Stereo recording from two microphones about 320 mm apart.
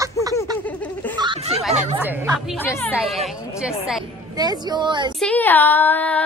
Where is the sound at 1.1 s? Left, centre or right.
Centre.